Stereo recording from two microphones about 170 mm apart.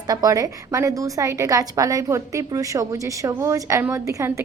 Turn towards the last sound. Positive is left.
turn(degrees=-15)  # may be behind; listen again after turning